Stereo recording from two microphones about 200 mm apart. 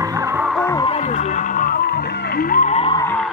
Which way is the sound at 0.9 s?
35° left (ahead or behind).